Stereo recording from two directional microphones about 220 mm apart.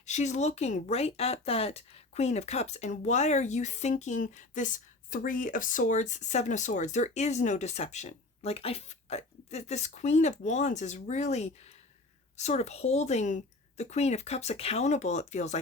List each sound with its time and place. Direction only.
0.0 s speech: 30° left (ahead or behind)